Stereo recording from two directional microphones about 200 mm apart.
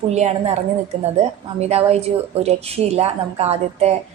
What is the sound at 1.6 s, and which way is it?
A woman's voice, 30° right (ahead or behind).